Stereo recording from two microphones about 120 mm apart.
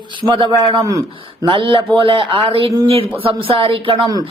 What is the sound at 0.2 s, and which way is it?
A man's voice, 45° right (ahead or behind).